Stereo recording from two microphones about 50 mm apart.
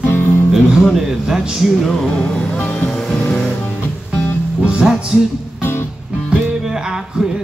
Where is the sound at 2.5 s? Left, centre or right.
Left.